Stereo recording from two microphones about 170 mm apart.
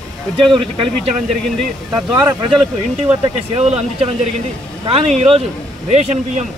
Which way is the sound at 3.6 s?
40° right (ahead or behind).